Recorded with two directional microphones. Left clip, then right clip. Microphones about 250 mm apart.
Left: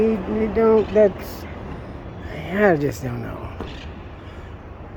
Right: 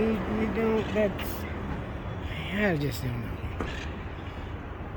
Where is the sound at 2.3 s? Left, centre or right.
Centre.